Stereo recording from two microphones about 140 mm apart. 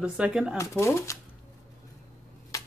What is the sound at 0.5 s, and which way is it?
Speech, 20° left (ahead or behind).